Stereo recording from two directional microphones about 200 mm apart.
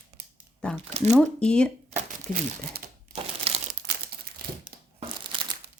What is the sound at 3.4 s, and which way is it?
Crumpling, 30° right (ahead or behind).